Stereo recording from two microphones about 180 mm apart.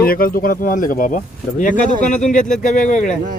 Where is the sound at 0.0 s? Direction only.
55° left (ahead or behind).